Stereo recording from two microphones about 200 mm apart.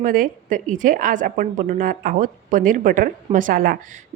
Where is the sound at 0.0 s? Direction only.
45° right (ahead or behind).